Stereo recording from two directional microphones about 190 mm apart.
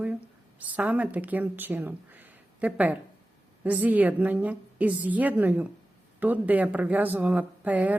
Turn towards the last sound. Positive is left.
turn(degrees=-10)  # may be behind; listen again after turning